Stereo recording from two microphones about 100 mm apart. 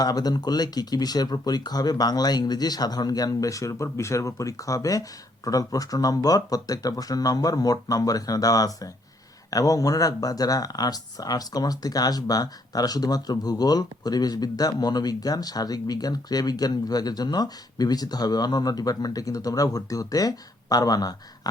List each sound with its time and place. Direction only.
0.0 s speech: 40° left (ahead or behind)